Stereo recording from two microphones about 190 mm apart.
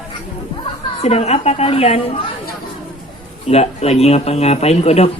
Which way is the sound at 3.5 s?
35° left (ahead or behind).